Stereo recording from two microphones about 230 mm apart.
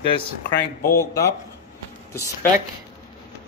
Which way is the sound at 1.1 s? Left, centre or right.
Centre.